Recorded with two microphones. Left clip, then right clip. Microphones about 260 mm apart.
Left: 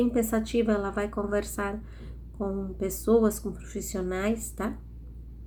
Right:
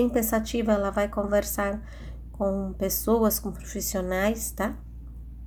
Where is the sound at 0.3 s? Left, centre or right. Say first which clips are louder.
Right 2 dB; right.